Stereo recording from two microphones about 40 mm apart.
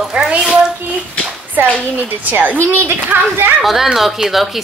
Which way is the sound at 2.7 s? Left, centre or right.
Right.